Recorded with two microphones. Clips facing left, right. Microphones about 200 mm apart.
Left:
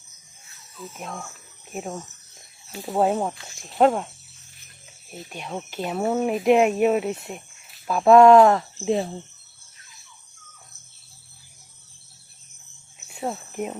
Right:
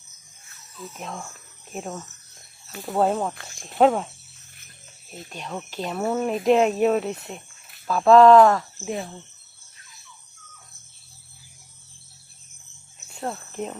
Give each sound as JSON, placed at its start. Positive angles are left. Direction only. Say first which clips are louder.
{"t": 0.9, "sound": "speech", "louder": "even", "side_deg": 5}
{"t": 5.1, "sound": "speech", "louder": "left 1 dB", "side_deg": 10}
{"t": 13.1, "sound": "speech", "louder": "left 2 dB", "side_deg": 5}